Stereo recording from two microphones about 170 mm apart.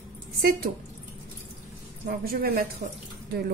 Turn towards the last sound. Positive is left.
turn(degrees=-65)  # may be behind; listen again after turning